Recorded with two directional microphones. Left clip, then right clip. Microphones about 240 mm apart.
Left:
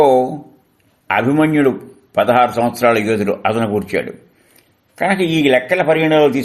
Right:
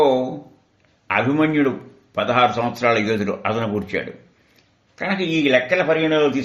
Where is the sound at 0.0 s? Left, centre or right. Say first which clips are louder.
Left 6 dB; left.